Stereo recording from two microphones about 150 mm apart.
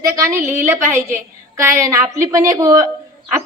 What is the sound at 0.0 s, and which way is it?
A woman's voice, 20° right (ahead or behind).